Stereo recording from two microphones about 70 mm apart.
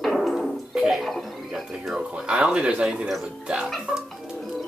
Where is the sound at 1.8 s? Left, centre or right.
Centre.